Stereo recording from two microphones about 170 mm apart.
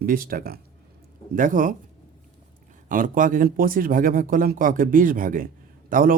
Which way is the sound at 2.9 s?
50° right (ahead or behind).